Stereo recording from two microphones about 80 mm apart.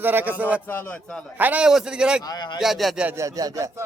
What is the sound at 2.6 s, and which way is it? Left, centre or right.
Speech, centre.